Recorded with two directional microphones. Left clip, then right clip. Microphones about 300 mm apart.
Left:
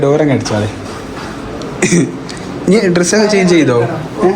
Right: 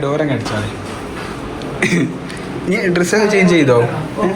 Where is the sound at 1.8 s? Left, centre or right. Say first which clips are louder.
Left 3 dB; centre.